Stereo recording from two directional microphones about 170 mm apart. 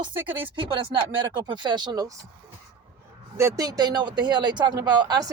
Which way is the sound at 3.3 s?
20° right (ahead or behind).